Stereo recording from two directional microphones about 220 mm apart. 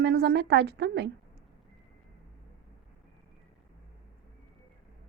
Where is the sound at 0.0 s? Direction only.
50° right (ahead or behind).